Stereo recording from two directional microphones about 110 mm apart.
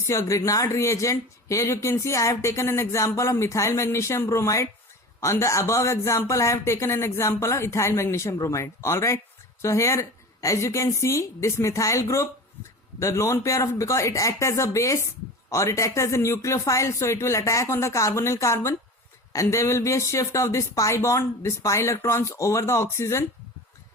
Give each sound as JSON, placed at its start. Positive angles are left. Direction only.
{"t": 0.1, "sound": "speech", "side_deg": 25}